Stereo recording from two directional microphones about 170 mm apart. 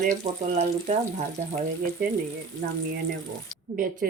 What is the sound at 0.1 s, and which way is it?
Speech, 45° right (ahead or behind).